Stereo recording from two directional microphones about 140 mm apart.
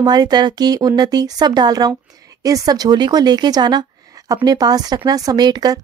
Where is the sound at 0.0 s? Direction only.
30° right (ahead or behind).